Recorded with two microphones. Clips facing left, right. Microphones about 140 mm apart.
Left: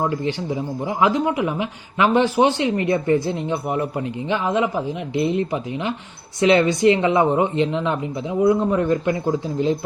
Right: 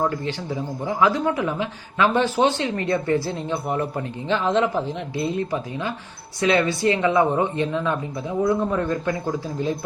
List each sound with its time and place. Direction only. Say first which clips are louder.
0.0 s a woman's voice: left 2 dB; 20° left (ahead or behind)